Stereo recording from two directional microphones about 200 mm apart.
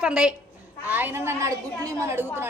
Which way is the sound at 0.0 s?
5° right (ahead or behind).